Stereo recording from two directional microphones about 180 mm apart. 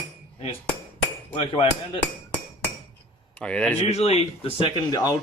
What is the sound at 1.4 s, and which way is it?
Speech, 25° left (ahead or behind).